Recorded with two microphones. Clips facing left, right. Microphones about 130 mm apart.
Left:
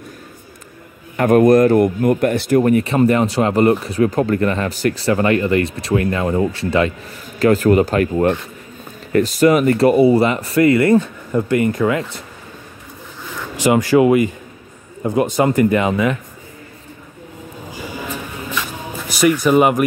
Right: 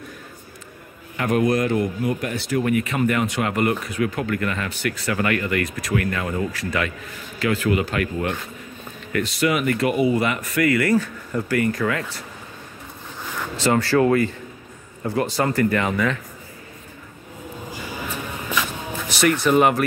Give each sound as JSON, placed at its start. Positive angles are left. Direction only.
{"t": 1.1, "sound": "a man's voice", "side_deg": 45}
{"t": 7.3, "sound": "a man's voice", "side_deg": 40}
{"t": 13.6, "sound": "speech", "side_deg": 15}
{"t": 19.1, "sound": "speech", "side_deg": 10}